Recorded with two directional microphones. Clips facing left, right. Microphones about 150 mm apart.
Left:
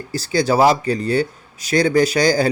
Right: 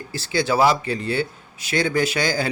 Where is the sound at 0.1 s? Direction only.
40° left (ahead or behind).